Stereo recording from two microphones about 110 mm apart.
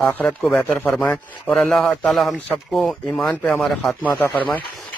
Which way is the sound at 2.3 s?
15° left (ahead or behind).